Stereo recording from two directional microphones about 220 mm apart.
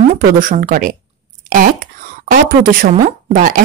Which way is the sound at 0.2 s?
40° right (ahead or behind).